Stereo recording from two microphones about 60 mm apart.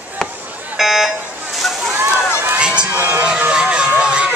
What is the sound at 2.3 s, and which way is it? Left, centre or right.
Crowd, right.